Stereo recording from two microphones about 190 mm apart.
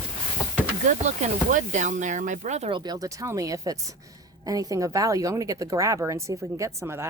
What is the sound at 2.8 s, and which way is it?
Speech, 20° right (ahead or behind).